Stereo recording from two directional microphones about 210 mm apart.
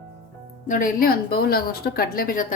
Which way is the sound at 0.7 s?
40° left (ahead or behind).